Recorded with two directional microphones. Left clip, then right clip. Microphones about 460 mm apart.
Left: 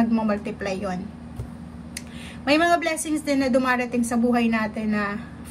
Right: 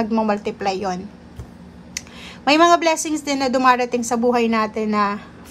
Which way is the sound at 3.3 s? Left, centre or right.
Centre.